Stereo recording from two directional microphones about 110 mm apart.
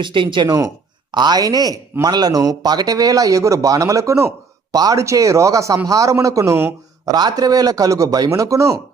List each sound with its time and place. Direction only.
0.0 s a man's voice: 50° right (ahead or behind); by 7.1 s 25° right (ahead or behind)
7.1 s speech: 35° right (ahead or behind)